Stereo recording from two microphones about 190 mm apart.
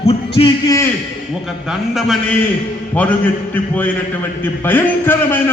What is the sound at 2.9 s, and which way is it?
A man's voice, 10° left (ahead or behind).